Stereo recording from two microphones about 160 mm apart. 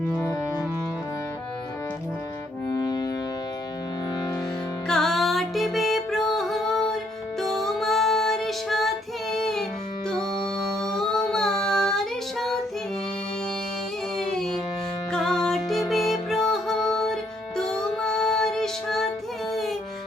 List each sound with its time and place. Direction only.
0.1 s music: 20° left (ahead or behind)
2.7 s music: 25° left (ahead or behind)
4.9 s music: 5° left (ahead or behind)
10.8 s child singing: 5° left (ahead or behind)
14.2 s music: 5° left (ahead or behind)